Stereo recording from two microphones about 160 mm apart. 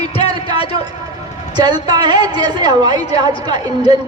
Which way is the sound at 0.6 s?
35° left (ahead or behind).